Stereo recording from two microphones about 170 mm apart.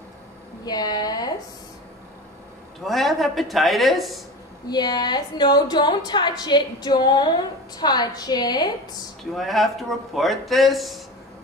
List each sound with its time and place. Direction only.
0.7 s a woman's voice: 25° left (ahead or behind)
2.8 s speech: centre (ahead or behind)
4.6 s a woman's voice: 25° left (ahead or behind)
9.3 s speech: centre (ahead or behind)